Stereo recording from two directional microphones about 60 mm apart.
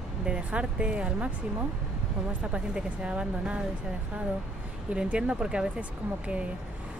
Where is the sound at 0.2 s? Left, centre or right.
Centre.